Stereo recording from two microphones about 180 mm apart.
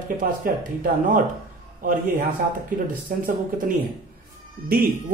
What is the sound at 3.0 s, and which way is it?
Speech, 50° right (ahead or behind).